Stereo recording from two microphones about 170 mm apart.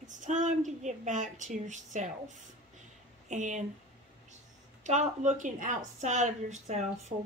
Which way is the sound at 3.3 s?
45° right (ahead or behind).